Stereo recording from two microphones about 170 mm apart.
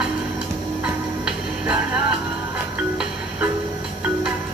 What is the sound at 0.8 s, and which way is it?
Music, 5° right (ahead or behind).